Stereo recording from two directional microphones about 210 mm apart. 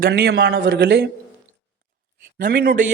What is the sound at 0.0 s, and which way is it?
Speech, 50° right (ahead or behind).